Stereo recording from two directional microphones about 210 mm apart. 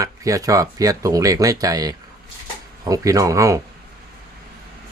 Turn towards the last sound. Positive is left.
turn(degrees=-15)  # may be behind; listen again after turning